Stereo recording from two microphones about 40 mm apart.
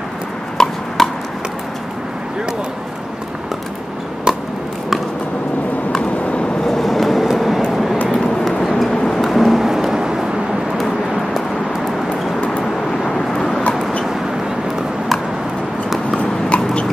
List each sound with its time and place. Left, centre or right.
0.6 s a sound: centre
6.6 s vehicle: centre
9.2 s a sound: centre
10.8 s vehicle: centre
13.0 s vehicle: centre
16.2 s clip-clop: left